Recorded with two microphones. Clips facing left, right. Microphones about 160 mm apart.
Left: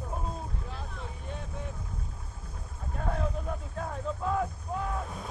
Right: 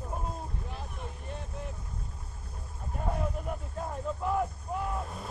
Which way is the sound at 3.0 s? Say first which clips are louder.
Even; 10° right (ahead or behind).